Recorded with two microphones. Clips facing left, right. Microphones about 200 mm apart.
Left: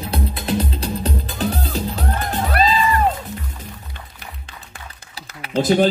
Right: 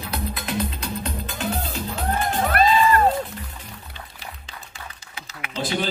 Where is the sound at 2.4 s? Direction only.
55° right (ahead or behind).